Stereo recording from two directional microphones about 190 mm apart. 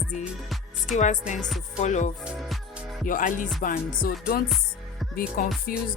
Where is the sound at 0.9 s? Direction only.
40° left (ahead or behind).